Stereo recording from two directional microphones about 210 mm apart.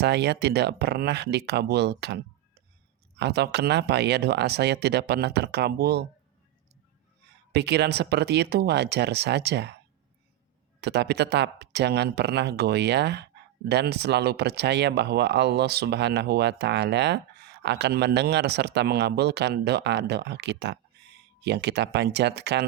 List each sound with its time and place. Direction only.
0.0 s speech: 50° right (ahead or behind)
7.5 s speech: 55° right (ahead or behind)
10.8 s speech: 55° right (ahead or behind)